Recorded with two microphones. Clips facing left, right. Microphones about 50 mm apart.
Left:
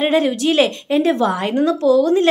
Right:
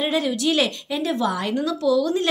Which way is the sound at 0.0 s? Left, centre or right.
Left.